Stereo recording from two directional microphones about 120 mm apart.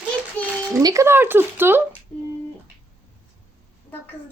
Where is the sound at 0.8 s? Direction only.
25° right (ahead or behind).